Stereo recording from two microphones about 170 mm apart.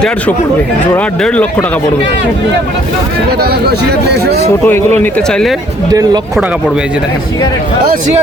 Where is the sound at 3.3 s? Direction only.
70° right (ahead or behind).